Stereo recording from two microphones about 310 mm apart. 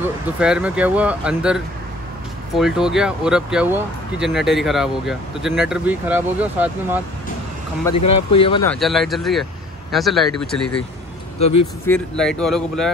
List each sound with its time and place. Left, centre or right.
0.4 s speech: centre
8.1 s speech: centre
8.6 s speech: centre
11.3 s speech: centre
11.8 s speech: centre